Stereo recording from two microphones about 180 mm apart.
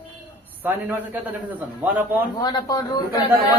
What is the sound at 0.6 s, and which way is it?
A man's voice, 10° right (ahead or behind).